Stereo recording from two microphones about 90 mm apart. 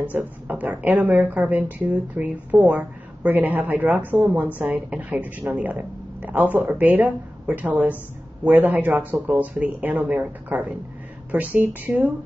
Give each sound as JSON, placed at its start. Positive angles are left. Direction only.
{"t": 0.0, "sound": "a woman's voice", "side_deg": -20}